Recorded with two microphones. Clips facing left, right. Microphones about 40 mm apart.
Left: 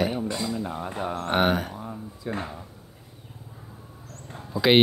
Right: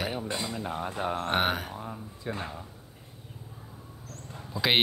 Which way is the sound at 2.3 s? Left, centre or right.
Right.